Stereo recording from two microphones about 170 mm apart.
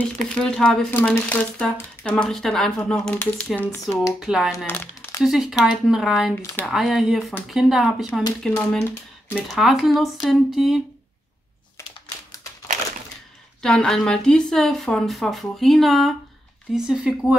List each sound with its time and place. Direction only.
0.4 s speech: 5° left (ahead or behind)
4.0 s speech: 5° right (ahead or behind)
4.6 s crumpling: 10° left (ahead or behind)
5.2 s speech: centre (ahead or behind)
8.1 s speech: 25° left (ahead or behind)
8.4 s speech: 5° left (ahead or behind)
13.6 s speech: 5° left (ahead or behind)